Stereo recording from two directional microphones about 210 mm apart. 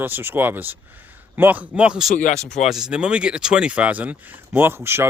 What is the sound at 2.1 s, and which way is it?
Speech, 35° left (ahead or behind).